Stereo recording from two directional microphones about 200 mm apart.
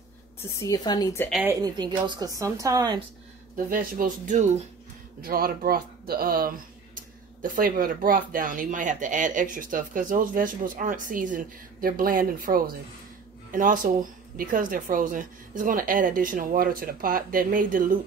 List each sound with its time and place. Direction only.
0.4 s a woman's voice: 15° left (ahead or behind)
1.3 s speech: 10° right (ahead or behind)
3.5 s speech: 45° right (ahead or behind)